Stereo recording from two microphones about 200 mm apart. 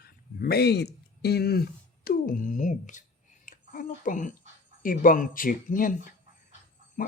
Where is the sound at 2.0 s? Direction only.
45° left (ahead or behind).